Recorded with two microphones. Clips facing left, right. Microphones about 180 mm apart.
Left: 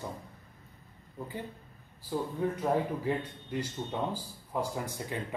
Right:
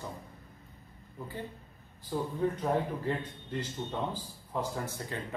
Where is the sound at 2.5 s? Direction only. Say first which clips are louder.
Left 1 dB; 10° left (ahead or behind).